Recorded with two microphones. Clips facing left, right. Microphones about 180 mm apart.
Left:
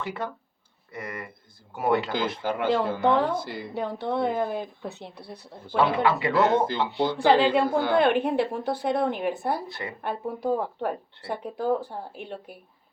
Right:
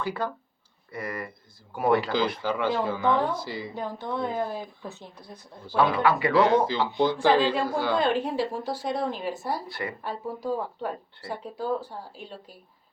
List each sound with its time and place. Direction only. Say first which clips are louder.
0.0 s speech: right 2 dB; 25° left (ahead or behind)
2.4 s speech: left 2 dB; 50° left (ahead or behind)
5.7 s speech: even; 25° left (ahead or behind)
6.9 s speech: left 1 dB; 60° left (ahead or behind)
9.6 s speech: right 2 dB; 25° left (ahead or behind)
10.0 s speech: left 3 dB; 60° left (ahead or behind)